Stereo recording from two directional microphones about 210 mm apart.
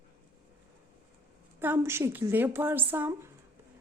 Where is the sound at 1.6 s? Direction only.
10° right (ahead or behind).